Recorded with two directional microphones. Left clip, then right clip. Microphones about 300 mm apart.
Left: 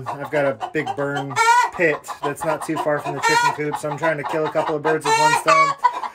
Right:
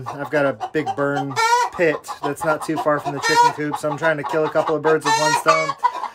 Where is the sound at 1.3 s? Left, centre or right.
Centre.